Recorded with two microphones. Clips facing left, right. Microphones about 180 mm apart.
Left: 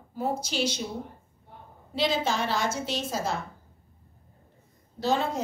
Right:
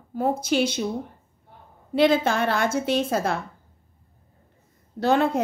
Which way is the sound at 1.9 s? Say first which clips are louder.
Right 7 dB; 55° right (ahead or behind).